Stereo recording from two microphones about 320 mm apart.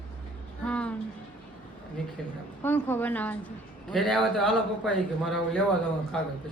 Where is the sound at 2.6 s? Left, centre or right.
Centre.